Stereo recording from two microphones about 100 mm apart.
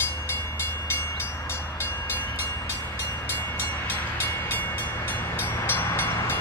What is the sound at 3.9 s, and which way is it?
Train, 20° left (ahead or behind).